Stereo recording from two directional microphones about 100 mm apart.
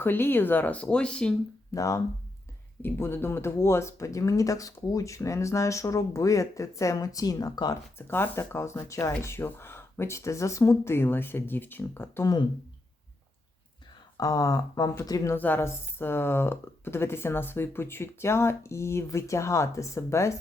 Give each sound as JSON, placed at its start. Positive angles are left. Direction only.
{"t": 0.0, "sound": "speech", "side_deg": 20}
{"t": 1.7, "sound": "speech", "side_deg": 30}
{"t": 7.9, "sound": "speech", "side_deg": 25}
{"t": 14.2, "sound": "speech", "side_deg": 35}
{"t": 15.4, "sound": "speech", "side_deg": 20}